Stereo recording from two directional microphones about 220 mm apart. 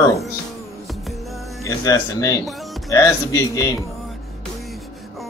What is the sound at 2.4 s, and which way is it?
Music, centre (ahead or behind).